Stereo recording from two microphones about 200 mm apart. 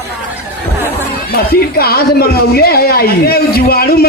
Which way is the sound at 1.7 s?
50° left (ahead or behind).